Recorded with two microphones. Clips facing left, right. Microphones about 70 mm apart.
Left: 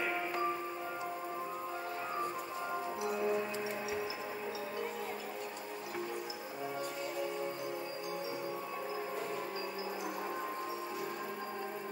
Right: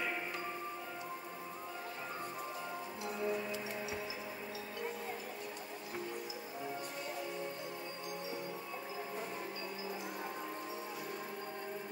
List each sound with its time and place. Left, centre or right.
3.1 s music: centre